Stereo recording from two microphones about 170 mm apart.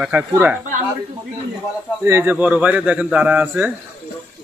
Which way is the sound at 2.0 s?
10° right (ahead or behind).